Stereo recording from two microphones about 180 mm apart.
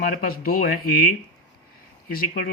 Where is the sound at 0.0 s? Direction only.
50° left (ahead or behind).